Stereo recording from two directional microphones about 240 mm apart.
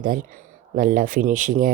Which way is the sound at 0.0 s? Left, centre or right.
Right.